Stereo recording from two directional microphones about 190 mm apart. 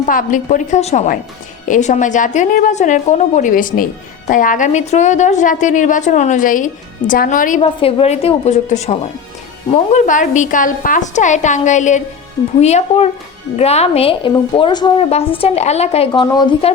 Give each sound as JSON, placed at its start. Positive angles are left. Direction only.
{"t": 0.0, "sound": "a woman's voice", "side_deg": 45}
{"t": 7.6, "sound": "a woman's voice", "side_deg": 30}